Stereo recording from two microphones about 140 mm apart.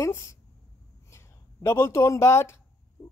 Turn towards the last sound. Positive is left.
turn(degrees=20)  # may be behind; listen again after turning